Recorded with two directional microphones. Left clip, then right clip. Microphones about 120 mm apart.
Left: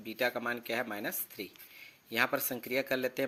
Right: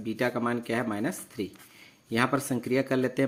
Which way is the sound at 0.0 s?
35° left (ahead or behind).